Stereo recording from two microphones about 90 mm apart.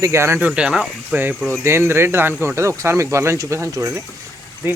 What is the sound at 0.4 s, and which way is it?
Speech, 10° right (ahead or behind).